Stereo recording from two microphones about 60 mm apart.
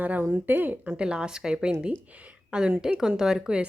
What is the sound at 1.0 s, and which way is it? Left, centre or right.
Speech, centre.